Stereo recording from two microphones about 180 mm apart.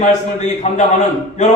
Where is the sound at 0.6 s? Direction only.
40° left (ahead or behind).